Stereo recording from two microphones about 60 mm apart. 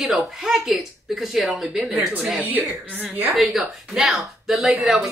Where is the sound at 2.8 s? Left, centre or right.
Centre.